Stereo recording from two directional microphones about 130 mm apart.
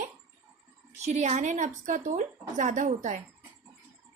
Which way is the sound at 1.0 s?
60° right (ahead or behind).